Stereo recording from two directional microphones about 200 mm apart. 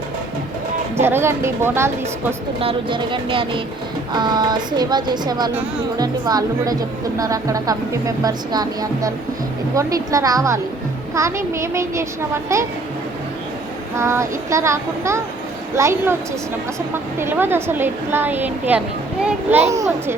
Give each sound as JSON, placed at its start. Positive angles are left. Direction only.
{"t": 0.9, "sound": "a woman's voice", "side_deg": -10}
{"t": 2.6, "sound": "a woman's voice", "side_deg": -25}
{"t": 13.9, "sound": "a woman's voice", "side_deg": -15}
{"t": 17.2, "sound": "a woman's voice", "side_deg": -10}